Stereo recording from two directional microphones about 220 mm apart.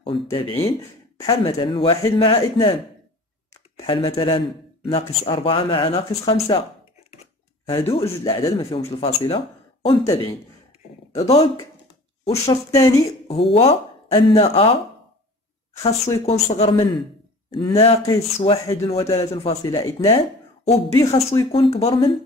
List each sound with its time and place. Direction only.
0.0 s speech: 20° left (ahead or behind)
3.8 s speech: 25° left (ahead or behind)
7.6 s speech: 25° left (ahead or behind)
12.3 s speech: 15° left (ahead or behind)
13.3 s speech: 25° left (ahead or behind)
15.8 s speech: 25° left (ahead or behind)